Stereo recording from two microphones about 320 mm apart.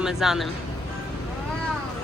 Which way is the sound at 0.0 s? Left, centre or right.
Centre.